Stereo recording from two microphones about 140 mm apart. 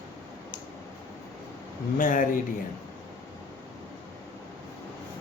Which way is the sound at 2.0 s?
75° left (ahead or behind).